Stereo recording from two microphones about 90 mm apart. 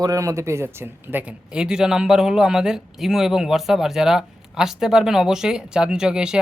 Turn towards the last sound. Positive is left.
turn(degrees=-10)  # may be behind; listen again after turning